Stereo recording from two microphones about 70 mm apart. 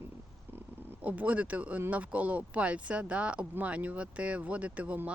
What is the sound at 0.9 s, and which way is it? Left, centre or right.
Speech, right.